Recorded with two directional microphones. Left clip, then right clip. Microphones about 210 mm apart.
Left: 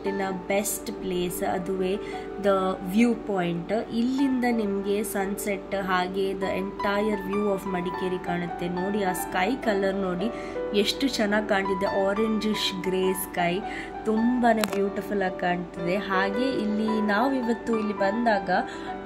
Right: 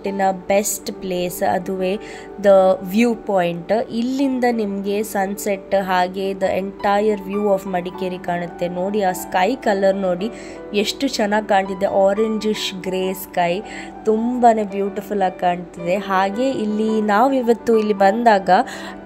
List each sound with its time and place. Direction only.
0.0 s a woman's voice: 30° right (ahead or behind)